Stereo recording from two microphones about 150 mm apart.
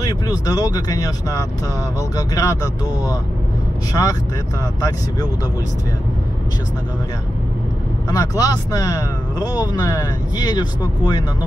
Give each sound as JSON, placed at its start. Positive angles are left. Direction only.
{"t": 0.0, "sound": "speech", "side_deg": 25}
{"t": 8.1, "sound": "speech", "side_deg": 25}